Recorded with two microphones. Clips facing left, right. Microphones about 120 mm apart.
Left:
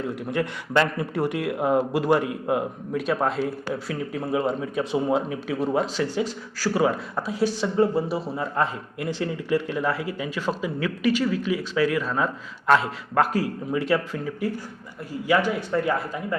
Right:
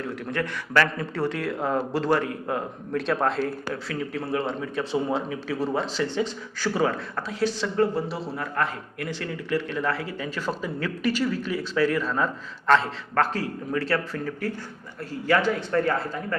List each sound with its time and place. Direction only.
0.0 s speech: 20° left (ahead or behind)
4.1 s speech: 15° left (ahead or behind)
5.5 s speech: centre (ahead or behind); by 10.2 s 15° left (ahead or behind)
10.2 s speech: centre (ahead or behind)